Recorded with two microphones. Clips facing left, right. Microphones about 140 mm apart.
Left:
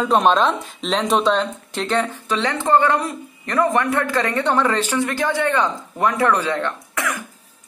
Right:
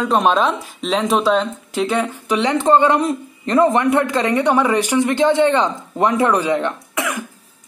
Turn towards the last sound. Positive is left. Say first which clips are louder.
# right 2 dB
turn(degrees=-20)  # may be behind; listen again after turning